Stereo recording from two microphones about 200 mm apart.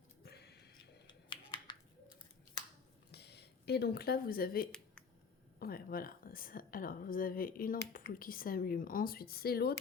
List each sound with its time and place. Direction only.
0.2 s a sound: 55° left (ahead or behind)
1.0 s finger snapping: 25° left (ahead or behind)
3.1 s a woman's voice: 55° left (ahead or behind)